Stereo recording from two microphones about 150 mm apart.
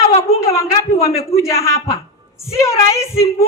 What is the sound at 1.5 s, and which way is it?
Speech, 20° left (ahead or behind).